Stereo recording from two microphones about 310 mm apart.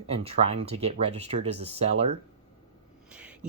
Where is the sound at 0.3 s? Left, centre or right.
Centre.